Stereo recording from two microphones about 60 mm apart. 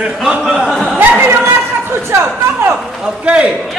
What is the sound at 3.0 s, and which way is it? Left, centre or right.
Speech, centre.